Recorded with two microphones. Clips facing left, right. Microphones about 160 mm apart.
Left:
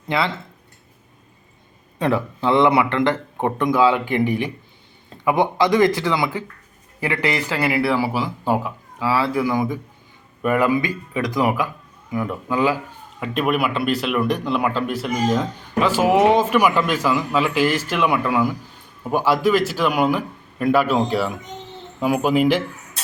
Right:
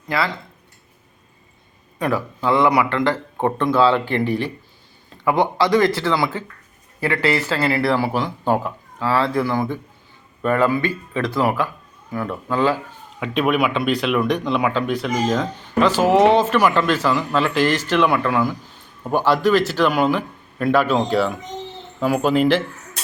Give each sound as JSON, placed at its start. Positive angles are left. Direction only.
{"t": 0.1, "sound": "speech", "side_deg": 25}
{"t": 2.0, "sound": "speech", "side_deg": 25}
{"t": 13.1, "sound": "speech", "side_deg": 0}